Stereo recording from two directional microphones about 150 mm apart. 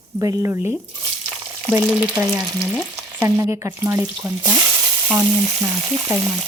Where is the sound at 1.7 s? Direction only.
15° right (ahead or behind).